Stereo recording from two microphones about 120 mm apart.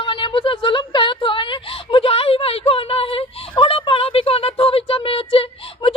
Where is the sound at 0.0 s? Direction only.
45° left (ahead or behind).